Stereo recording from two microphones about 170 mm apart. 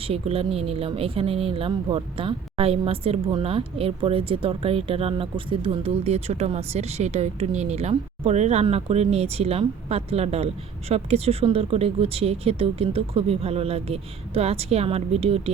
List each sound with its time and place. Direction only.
0.0 s speech: 35° right (ahead or behind)